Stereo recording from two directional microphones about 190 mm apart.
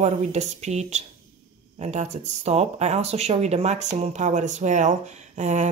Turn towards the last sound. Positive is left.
turn(degrees=-40)  # may be behind; listen again after turning